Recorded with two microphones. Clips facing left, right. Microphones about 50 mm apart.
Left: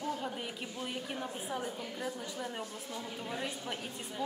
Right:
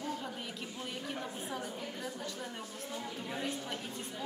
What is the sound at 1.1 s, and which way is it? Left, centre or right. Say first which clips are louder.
A woman's voice: left 2 dB; centre.